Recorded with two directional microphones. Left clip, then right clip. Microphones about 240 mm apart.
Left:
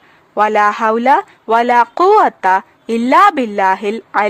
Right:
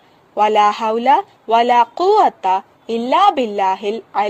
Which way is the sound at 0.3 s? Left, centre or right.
Centre.